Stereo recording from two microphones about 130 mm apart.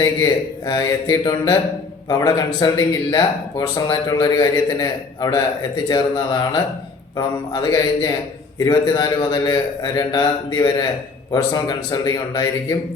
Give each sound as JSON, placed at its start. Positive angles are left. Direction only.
{"t": 0.0, "sound": "speech", "side_deg": 30}